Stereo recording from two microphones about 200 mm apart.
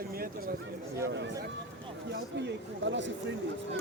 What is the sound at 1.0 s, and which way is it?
A man's voice, 55° right (ahead or behind).